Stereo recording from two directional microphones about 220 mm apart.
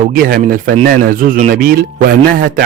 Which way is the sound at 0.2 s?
40° right (ahead or behind).